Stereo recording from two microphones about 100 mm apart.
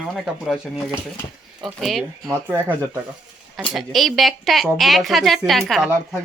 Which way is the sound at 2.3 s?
20° right (ahead or behind).